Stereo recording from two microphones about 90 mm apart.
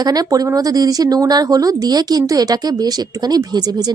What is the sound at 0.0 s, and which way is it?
A woman's voice, 45° right (ahead or behind).